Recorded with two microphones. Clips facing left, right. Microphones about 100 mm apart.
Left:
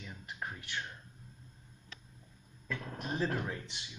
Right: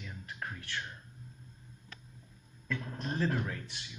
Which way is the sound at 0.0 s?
15° left (ahead or behind).